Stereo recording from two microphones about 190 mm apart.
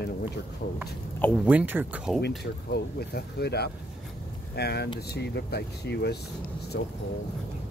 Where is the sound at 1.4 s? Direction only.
5° right (ahead or behind).